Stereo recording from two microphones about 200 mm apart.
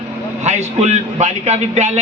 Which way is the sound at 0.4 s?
35° right (ahead or behind).